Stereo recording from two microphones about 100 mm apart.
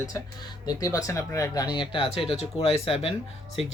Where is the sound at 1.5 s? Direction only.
45° left (ahead or behind).